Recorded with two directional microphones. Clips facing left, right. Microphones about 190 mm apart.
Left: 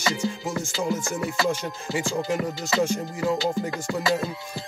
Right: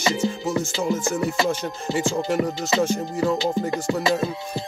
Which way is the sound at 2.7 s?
20° right (ahead or behind).